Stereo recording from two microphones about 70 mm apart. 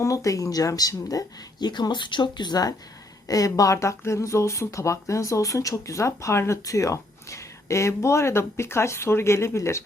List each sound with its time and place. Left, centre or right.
0.0 s speech: left
3.2 s speech: left